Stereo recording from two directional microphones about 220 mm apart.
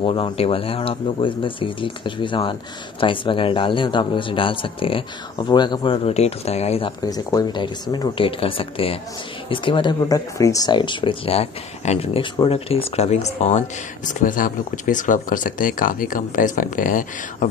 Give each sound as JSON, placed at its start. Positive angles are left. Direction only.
{"t": 0.0, "sound": "speech", "side_deg": 25}
{"t": 7.1, "sound": "speech", "side_deg": 15}